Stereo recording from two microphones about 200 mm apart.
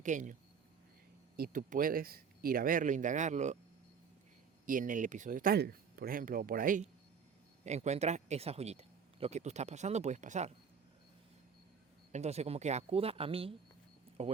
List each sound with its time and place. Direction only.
0.0 s speech: 40° right (ahead or behind)
1.4 s speech: 45° right (ahead or behind)
4.6 s speech: 40° right (ahead or behind)
12.1 s speech: 35° right (ahead or behind)